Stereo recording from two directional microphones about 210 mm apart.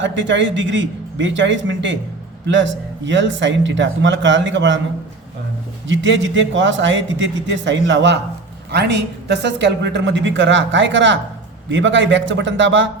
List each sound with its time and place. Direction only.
0.0 s a woman's voice: 60° right (ahead or behind)
5.9 s a woman's voice: 60° right (ahead or behind)